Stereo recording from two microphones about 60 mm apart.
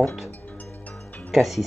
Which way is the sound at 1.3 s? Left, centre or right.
Centre.